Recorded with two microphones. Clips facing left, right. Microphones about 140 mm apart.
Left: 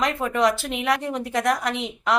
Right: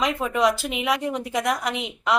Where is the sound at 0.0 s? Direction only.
5° right (ahead or behind).